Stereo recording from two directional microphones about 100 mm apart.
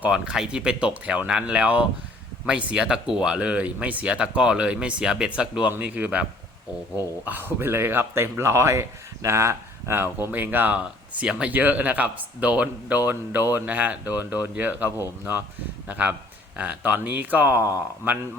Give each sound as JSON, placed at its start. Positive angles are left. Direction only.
{"t": 0.0, "sound": "speech", "side_deg": -10}
{"t": 7.3, "sound": "speech", "side_deg": -20}